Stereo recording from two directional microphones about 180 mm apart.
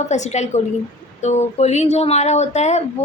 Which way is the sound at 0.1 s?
40° left (ahead or behind).